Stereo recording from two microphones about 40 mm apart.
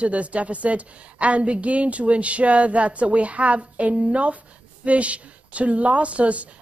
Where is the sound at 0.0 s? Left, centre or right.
Right.